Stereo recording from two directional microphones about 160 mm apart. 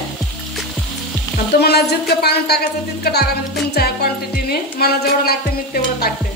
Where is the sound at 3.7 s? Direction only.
75° left (ahead or behind).